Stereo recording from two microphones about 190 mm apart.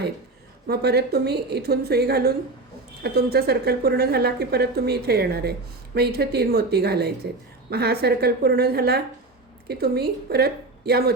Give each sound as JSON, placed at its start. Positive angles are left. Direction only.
{"t": 0.7, "sound": "a woman's voice", "side_deg": -60}